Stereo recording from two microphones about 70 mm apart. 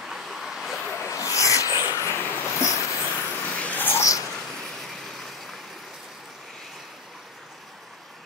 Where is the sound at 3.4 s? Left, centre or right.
Left.